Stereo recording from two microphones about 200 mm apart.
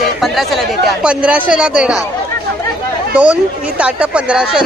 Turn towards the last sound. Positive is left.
turn(degrees=-5)  # may be behind; listen again after turning